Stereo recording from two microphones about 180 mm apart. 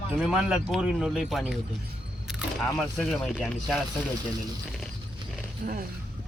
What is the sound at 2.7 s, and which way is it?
Speech, 5° left (ahead or behind).